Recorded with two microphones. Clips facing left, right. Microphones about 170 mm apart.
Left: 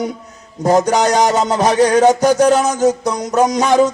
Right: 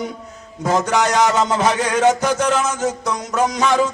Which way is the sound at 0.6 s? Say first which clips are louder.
Left 5 dB; 40° left (ahead or behind).